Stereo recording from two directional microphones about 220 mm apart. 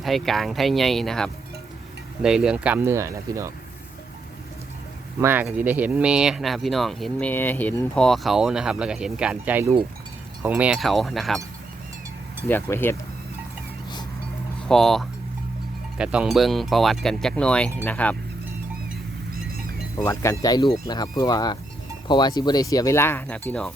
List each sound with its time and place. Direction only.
0.0 s speech: centre (ahead or behind)
5.2 s speech: 10° right (ahead or behind)
12.5 s speech: 10° left (ahead or behind)
14.7 s speech: centre (ahead or behind)
20.1 s speech: 15° left (ahead or behind)